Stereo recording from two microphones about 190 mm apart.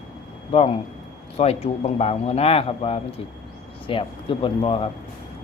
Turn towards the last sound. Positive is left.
turn(degrees=30)  # may be behind; listen again after turning